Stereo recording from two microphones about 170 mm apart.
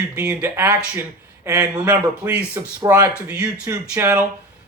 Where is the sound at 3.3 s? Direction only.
5° right (ahead or behind).